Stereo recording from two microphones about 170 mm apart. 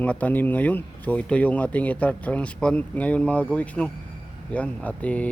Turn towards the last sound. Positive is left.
turn(degrees=10)  # may be behind; listen again after turning